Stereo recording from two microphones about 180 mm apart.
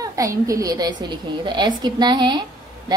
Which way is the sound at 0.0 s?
20° right (ahead or behind).